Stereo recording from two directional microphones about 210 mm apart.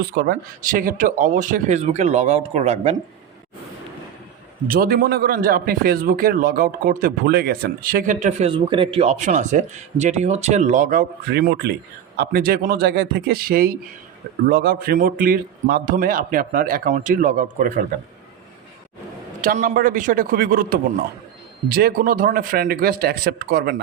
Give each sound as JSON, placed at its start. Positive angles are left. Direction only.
{"t": 0.0, "sound": "a man's voice", "side_deg": -45}
{"t": 4.7, "sound": "a man's voice", "side_deg": -45}
{"t": 19.4, "sound": "a man's voice", "side_deg": -40}